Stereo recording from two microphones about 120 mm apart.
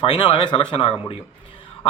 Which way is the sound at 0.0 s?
50° left (ahead or behind).